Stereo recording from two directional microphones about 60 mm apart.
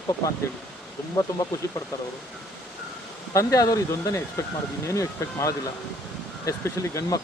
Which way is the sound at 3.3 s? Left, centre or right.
Left.